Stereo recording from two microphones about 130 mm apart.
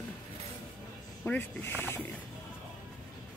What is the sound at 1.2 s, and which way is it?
Speech, 15° left (ahead or behind).